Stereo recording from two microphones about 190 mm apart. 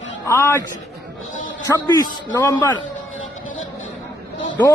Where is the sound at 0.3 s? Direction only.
15° left (ahead or behind).